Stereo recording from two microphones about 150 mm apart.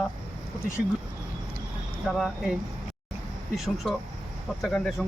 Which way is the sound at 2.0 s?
Centre (ahead or behind).